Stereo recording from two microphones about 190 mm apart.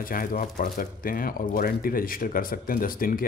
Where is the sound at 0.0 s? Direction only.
45° left (ahead or behind).